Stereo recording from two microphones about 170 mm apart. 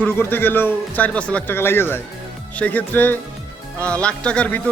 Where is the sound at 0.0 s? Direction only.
10° left (ahead or behind).